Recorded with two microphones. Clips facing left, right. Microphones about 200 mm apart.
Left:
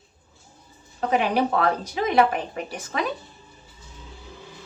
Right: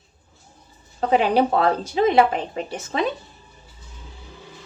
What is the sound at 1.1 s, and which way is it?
Speech, 30° right (ahead or behind).